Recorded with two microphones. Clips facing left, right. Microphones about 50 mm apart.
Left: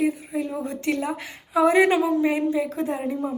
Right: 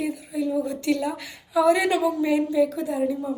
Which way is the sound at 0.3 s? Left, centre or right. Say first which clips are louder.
Right 2 dB; left.